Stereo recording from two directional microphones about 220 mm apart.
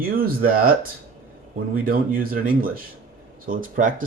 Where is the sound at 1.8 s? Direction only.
40° right (ahead or behind).